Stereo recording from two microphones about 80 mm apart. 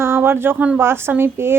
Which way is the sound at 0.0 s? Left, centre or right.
Right.